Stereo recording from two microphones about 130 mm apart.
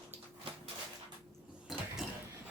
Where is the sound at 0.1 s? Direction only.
15° right (ahead or behind).